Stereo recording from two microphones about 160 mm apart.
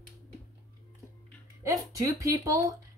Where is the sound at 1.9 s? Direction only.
20° right (ahead or behind).